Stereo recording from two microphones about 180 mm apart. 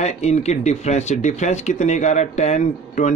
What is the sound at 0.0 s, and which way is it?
Speech, 40° left (ahead or behind).